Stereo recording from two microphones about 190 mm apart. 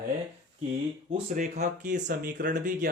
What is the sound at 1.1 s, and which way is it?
Speech, 40° right (ahead or behind).